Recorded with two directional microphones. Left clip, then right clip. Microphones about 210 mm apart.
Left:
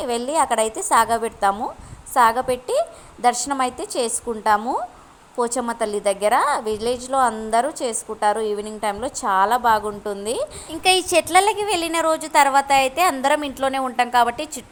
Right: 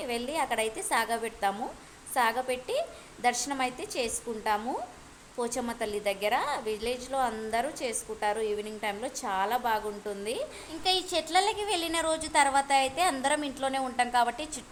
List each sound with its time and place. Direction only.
0.0 s a woman's voice: 25° left (ahead or behind)